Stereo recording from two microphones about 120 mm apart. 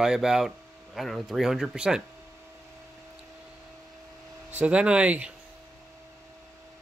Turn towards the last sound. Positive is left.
turn(degrees=-10)  # may be behind; listen again after turning